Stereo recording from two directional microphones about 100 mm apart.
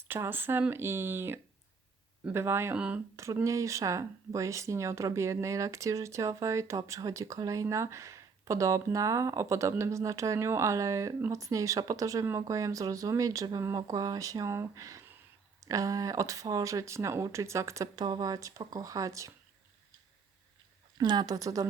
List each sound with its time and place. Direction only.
0.0 s speech: 20° right (ahead or behind)
2.7 s speech: 10° right (ahead or behind)
3.4 s speech: 30° right (ahead or behind)
18.0 s speech: 45° right (ahead or behind)
21.0 s speech: 45° right (ahead or behind)